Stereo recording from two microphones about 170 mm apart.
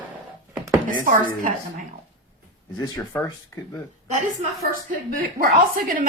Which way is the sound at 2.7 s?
20° left (ahead or behind).